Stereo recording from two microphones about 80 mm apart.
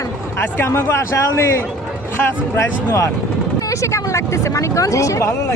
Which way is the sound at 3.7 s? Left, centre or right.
Left.